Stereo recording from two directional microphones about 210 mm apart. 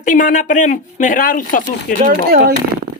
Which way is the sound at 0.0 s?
40° left (ahead or behind).